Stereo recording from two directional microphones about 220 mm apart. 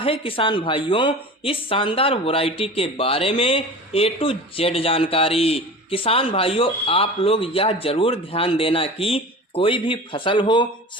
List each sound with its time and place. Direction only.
0.0 s speech: 25° left (ahead or behind)